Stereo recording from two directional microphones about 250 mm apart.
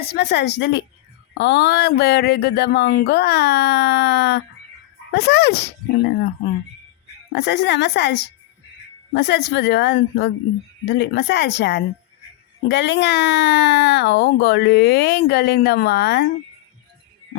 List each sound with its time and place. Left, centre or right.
0.1 s a woman's voice: left
7.3 s a woman's voice: left